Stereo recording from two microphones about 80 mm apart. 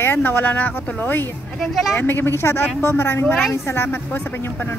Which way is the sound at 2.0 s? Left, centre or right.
Left.